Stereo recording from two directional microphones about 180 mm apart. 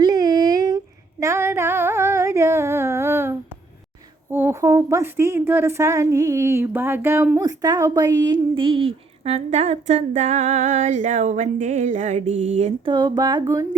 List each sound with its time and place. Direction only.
0.0 s a sound: 20° right (ahead or behind)
1.2 s female singing: 15° right (ahead or behind)
4.3 s a woman's voice: 10° right (ahead or behind); by 12.9 s 40° right (ahead or behind)
12.9 s a woman's voice: 20° right (ahead or behind)